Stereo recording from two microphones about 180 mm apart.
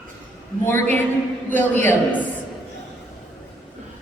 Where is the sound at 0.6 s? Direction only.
10° left (ahead or behind).